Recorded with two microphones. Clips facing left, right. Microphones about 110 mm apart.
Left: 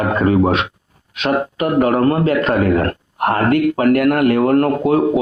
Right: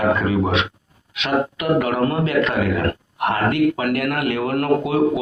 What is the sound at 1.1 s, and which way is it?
A man's voice, 40° left (ahead or behind).